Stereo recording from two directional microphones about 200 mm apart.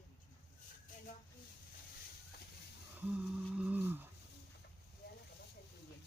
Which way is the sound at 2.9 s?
5° right (ahead or behind).